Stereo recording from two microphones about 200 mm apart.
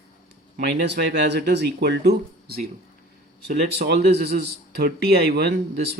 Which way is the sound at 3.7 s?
55° right (ahead or behind).